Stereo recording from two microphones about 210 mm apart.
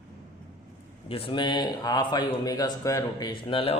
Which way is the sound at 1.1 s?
25° left (ahead or behind).